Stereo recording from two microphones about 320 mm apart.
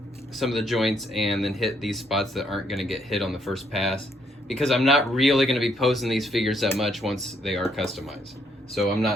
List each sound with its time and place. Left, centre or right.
0.3 s speech: centre